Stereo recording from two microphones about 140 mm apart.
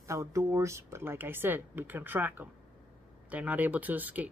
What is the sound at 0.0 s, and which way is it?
Speech, 20° right (ahead or behind).